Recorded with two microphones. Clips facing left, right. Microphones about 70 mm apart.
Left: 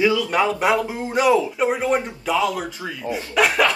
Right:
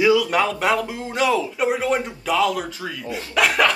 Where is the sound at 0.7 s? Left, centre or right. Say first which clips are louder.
Left 2 dB; left.